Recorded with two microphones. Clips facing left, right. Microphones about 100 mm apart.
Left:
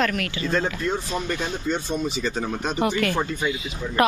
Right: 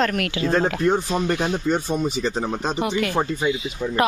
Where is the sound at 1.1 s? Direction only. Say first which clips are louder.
Right 5 dB; 20° right (ahead or behind).